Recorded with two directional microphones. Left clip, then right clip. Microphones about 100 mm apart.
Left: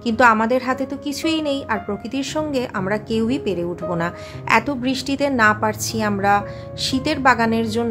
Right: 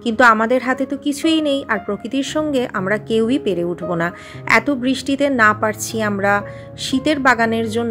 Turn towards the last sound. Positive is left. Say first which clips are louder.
# right 2 dB
turn(degrees=-25)  # may be behind; listen again after turning